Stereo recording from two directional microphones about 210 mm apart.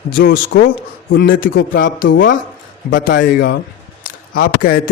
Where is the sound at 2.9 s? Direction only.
55° left (ahead or behind).